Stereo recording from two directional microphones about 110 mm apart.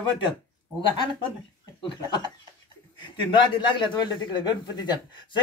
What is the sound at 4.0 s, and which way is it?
Speech, 40° left (ahead or behind).